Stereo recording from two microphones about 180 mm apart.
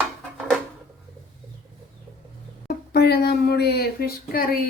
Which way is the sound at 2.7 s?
60° left (ahead or behind).